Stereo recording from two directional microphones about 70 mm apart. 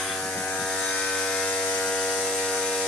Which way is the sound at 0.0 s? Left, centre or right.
Centre.